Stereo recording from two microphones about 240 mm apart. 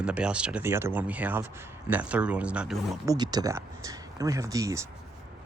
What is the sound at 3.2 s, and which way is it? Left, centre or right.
Speech, centre.